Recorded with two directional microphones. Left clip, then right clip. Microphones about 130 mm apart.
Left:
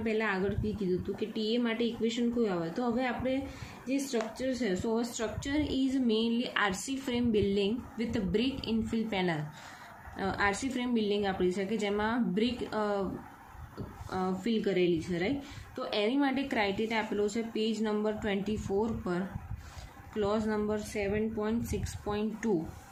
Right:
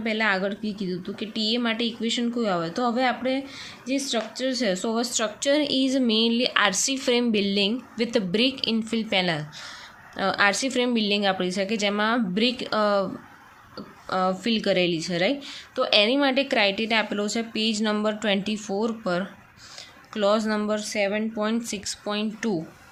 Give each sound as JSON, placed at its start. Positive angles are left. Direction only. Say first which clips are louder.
{"t": 0.0, "sound": "a woman's voice", "louder": "right 7 dB", "side_deg": -70}
{"t": 10.2, "sound": "a woman's voice", "louder": "right 9 dB", "side_deg": -60}
{"t": 14.1, "sound": "a woman's voice", "louder": "right 9 dB", "side_deg": -65}
{"t": 20.1, "sound": "a woman's voice", "louder": "right 8 dB", "side_deg": -55}
{"t": 21.7, "sound": "speech", "louder": "right 6 dB", "side_deg": -40}